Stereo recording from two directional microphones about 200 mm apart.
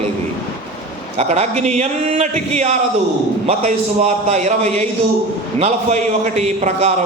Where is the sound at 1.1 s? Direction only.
35° right (ahead or behind).